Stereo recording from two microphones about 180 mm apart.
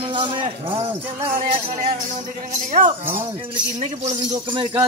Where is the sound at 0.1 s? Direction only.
30° right (ahead or behind).